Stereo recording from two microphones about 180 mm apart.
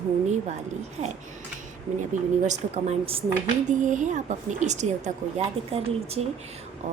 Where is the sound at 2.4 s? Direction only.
35° right (ahead or behind).